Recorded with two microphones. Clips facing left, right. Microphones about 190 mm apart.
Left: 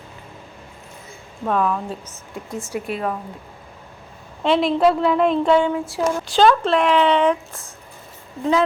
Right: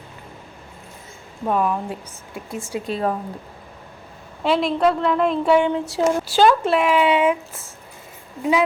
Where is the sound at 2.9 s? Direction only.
35° right (ahead or behind).